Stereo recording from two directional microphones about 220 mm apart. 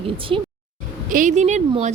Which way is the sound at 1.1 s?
35° right (ahead or behind).